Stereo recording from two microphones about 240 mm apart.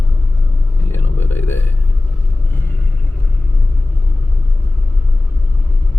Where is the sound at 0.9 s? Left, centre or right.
Centre.